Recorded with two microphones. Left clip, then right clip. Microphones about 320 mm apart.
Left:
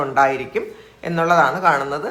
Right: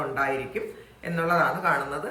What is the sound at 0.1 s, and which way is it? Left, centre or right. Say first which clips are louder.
A woman's voice: left 10 dB; centre.